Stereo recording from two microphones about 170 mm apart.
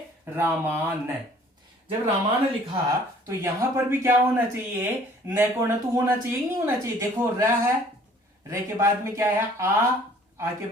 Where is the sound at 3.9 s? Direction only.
10° right (ahead or behind).